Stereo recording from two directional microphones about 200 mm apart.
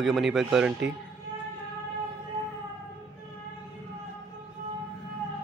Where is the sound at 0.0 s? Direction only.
Centre (ahead or behind).